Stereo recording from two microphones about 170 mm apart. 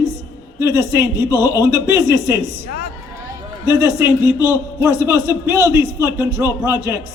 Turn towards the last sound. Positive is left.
turn(degrees=-15)  # may be behind; listen again after turning